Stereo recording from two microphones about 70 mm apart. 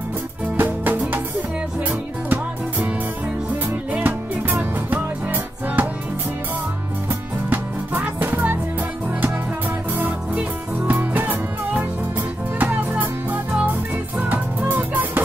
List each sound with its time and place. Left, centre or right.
0.6 s music: right
3.9 s music: right
7.4 s music: right
9.9 s music: right